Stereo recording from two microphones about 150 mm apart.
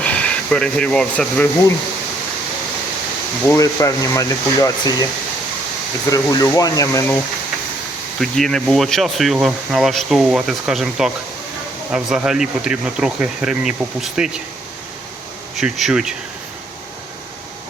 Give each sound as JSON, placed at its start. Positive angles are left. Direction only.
{"t": 0.0, "sound": "speech", "side_deg": 10}
{"t": 3.4, "sound": "speech", "side_deg": 20}
{"t": 6.1, "sound": "speech", "side_deg": 25}
{"t": 8.2, "sound": "speech", "side_deg": 5}
{"t": 15.5, "sound": "speech", "side_deg": -5}